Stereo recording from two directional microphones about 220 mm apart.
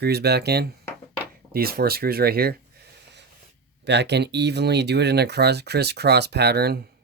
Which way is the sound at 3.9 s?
50° right (ahead or behind).